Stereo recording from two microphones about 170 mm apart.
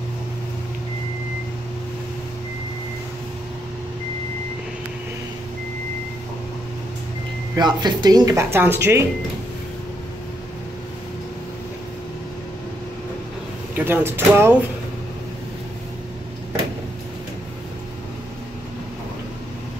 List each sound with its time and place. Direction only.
7.5 s speech: 25° right (ahead or behind)
13.7 s speech: 10° right (ahead or behind)